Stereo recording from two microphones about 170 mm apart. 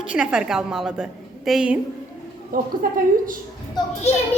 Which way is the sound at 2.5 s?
55° right (ahead or behind).